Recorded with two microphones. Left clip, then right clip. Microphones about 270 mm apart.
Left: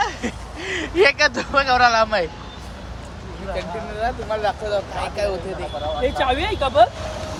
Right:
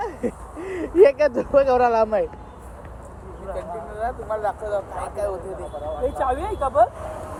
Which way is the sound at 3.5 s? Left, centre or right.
Left.